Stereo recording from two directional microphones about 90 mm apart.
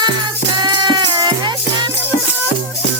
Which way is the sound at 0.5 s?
55° right (ahead or behind).